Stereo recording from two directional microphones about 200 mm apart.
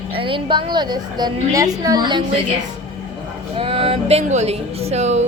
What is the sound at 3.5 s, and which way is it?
Speech, 25° right (ahead or behind).